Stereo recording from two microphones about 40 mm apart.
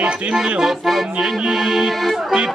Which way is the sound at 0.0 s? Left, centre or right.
Right.